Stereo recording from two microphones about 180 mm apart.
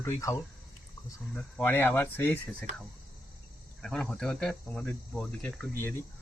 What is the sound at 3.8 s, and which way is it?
Speech, 5° left (ahead or behind).